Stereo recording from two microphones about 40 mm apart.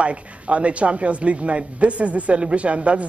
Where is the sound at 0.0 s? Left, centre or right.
Right.